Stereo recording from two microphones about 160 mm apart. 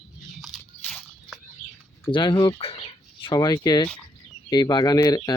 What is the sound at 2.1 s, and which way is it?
Speech, 30° left (ahead or behind).